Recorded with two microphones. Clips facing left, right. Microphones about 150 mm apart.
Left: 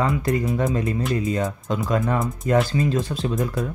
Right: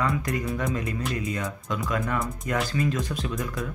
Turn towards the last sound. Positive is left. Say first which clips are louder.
# left 6 dB
turn(degrees=30)  # may be behind; listen again after turning